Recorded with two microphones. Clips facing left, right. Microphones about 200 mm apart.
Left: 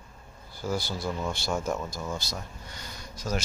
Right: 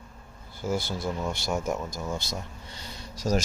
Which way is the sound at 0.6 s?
20° right (ahead or behind).